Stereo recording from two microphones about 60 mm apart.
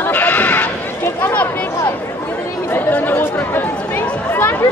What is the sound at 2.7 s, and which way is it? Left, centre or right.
Chatter, left.